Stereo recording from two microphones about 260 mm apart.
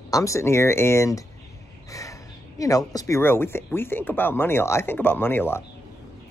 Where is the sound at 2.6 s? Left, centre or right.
Centre.